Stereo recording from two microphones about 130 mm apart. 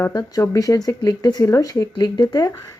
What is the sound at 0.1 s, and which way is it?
A woman's voice, 25° left (ahead or behind).